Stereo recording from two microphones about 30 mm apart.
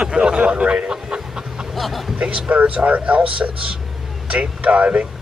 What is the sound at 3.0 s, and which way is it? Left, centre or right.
Speech, right.